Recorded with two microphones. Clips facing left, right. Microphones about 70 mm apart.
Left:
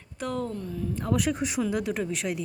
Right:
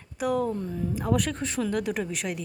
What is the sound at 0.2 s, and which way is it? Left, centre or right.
Speech, centre.